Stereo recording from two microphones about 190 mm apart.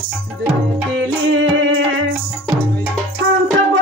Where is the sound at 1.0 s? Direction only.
80° right.